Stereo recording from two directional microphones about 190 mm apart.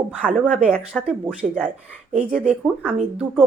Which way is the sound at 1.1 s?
5° right (ahead or behind).